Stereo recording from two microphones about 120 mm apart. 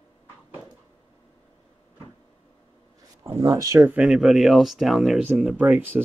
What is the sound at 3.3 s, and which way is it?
Speech, 30° right (ahead or behind).